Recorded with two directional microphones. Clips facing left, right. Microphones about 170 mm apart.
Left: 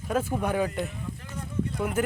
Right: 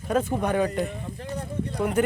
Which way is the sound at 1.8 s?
5° left (ahead or behind).